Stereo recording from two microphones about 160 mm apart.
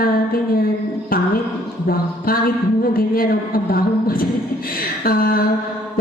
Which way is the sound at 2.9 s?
65° left (ahead or behind).